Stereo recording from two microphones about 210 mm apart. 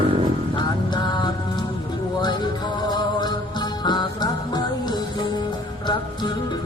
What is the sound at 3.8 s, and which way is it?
Music, 20° left (ahead or behind).